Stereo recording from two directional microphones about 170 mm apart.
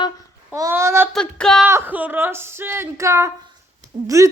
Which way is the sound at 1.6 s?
10° right (ahead or behind).